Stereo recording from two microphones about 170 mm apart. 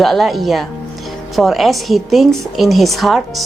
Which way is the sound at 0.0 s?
Centre (ahead or behind).